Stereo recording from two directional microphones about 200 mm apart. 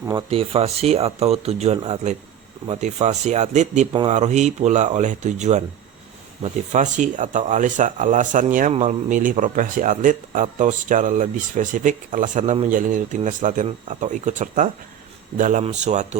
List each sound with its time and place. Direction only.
0.0 s speech: 20° right (ahead or behind)